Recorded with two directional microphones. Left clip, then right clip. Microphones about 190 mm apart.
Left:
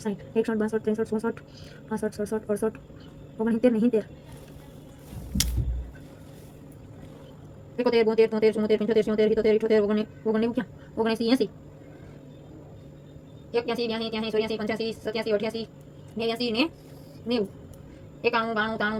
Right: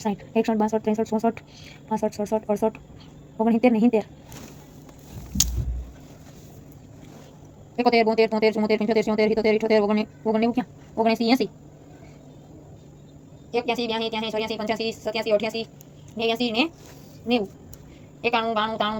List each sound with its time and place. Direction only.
0.0 s speech: 35° right (ahead or behind)
7.8 s speech: 40° right (ahead or behind)
13.5 s a woman's voice: 45° right (ahead or behind)
18.2 s a woman's voice: 40° right (ahead or behind)